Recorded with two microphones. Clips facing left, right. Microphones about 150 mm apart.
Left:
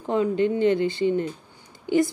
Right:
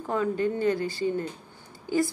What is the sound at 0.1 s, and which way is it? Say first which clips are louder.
Speech: left 5 dB; 20° left (ahead or behind).